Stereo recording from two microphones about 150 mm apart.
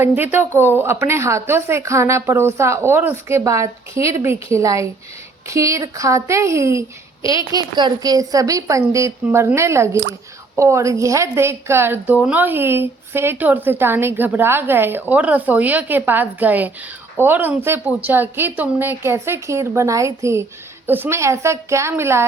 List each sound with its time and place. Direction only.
0.0 s a woman's voice: 15° right (ahead or behind)